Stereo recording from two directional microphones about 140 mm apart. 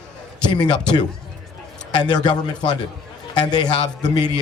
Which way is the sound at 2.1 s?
30° left (ahead or behind).